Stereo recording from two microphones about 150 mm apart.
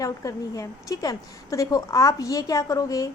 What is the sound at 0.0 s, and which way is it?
A woman's voice, 20° left (ahead or behind).